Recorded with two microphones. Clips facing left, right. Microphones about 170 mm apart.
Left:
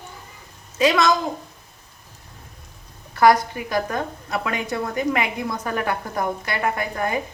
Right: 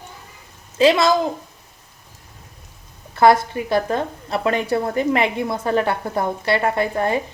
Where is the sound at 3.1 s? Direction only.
25° right (ahead or behind).